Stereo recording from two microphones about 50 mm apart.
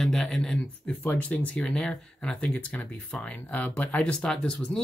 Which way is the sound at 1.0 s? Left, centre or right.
Left.